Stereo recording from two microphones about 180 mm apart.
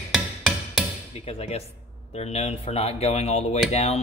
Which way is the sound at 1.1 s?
35° left (ahead or behind).